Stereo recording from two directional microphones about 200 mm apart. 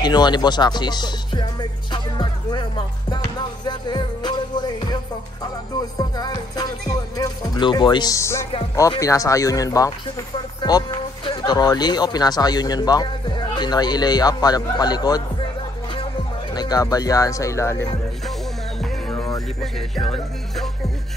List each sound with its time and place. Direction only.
0.0 s music: 20° left (ahead or behind)
5.9 s music: 20° left (ahead or behind)
9.0 s speech: 15° left (ahead or behind)
16.5 s speech: 20° left (ahead or behind)
18.8 s music: 5° left (ahead or behind)